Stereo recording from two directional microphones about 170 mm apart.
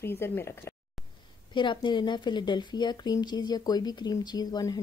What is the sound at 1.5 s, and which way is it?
Speech, 30° left (ahead or behind).